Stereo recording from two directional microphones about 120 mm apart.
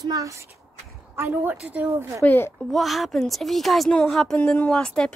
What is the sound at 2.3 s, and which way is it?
Music, 20° left (ahead or behind).